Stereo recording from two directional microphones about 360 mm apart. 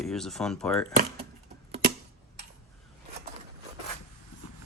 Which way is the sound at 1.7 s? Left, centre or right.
Right.